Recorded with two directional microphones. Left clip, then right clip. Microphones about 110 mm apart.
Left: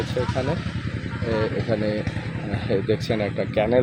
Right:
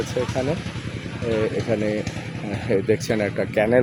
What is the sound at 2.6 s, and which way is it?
Speech, 90° right.